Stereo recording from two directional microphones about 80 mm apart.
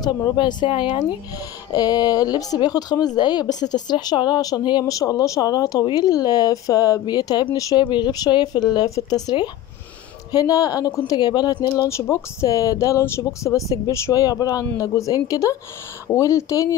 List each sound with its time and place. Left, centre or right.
0.0 s speech: left
1.7 s speech: left
4.8 s speech: left
7.5 s speech: left
7.8 s speech: left
8.3 s speech: left
11.9 s speech: left